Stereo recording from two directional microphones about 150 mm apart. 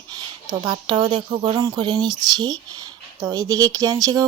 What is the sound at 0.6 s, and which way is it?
Speech, 30° right (ahead or behind).